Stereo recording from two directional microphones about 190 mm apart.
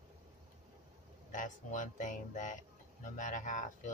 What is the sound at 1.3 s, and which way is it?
Speech, 40° left (ahead or behind).